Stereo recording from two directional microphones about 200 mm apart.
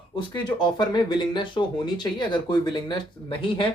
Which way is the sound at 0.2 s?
20° left (ahead or behind).